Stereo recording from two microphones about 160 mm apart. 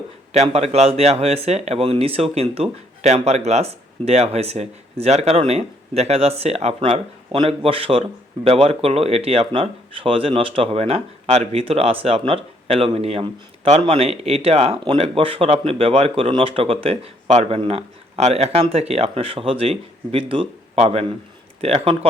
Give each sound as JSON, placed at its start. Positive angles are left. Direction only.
{"t": 0.3, "sound": "speech", "side_deg": -40}